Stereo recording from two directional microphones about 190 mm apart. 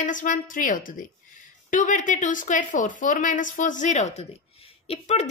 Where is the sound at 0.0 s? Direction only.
45° left (ahead or behind).